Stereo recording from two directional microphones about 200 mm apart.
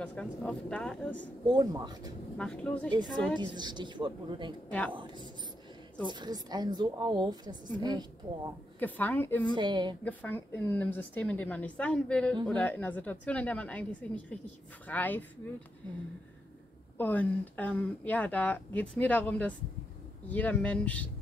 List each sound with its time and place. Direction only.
0.0 s speech: 5° left (ahead or behind)
1.5 s a woman's voice: 20° right (ahead or behind)
2.3 s speech: 5° left (ahead or behind)
3.3 s a woman's voice: 20° right (ahead or behind)
4.6 s speech: 5° left (ahead or behind)
4.9 s a woman's voice: 25° right (ahead or behind)
8.7 s speech: 10° left (ahead or behind)
9.6 s a woman's voice: 20° right (ahead or behind)
10.0 s speech: 10° left (ahead or behind)
16.9 s speech: 10° left (ahead or behind)